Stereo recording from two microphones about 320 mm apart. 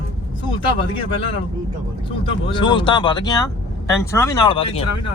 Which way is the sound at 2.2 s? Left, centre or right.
Centre.